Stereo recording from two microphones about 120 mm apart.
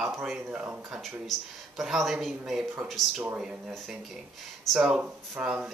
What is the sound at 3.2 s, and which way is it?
Speech, 10° right (ahead or behind).